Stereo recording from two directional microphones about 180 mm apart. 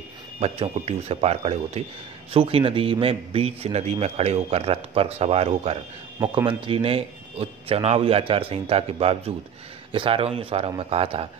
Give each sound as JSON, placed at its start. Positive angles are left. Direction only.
{"t": 0.4, "sound": "a man's voice", "side_deg": -35}